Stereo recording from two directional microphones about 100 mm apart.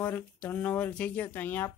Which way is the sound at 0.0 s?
15° left (ahead or behind).